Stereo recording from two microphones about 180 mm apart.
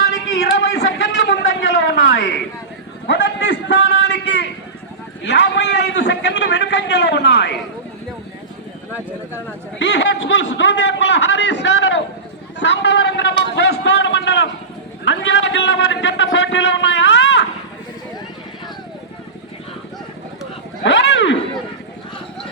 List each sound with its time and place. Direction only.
0.6 s a sound: 70° left (ahead or behind)
5.2 s a man's voice: 70° left (ahead or behind)
9.7 s a man's voice: 70° left (ahead or behind)
15.0 s a man's voice: 90° left
20.8 s speech: 85° left